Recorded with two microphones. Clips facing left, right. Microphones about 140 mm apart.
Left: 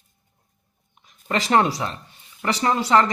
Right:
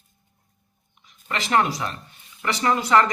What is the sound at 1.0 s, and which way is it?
Speech, 35° left (ahead or behind).